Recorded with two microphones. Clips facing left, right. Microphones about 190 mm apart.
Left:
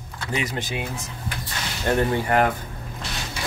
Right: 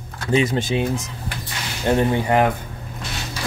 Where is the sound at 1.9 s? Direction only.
20° right (ahead or behind).